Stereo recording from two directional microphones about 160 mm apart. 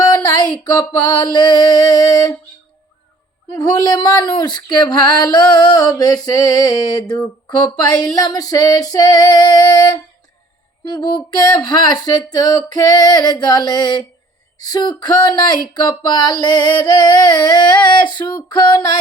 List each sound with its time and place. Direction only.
0.1 s a sound: 25° left (ahead or behind)
0.6 s female singing: 25° left (ahead or behind)
3.6 s female singing: 25° left (ahead or behind)